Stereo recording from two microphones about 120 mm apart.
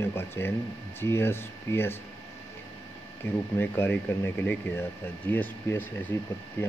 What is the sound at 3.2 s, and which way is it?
Speech, 15° left (ahead or behind).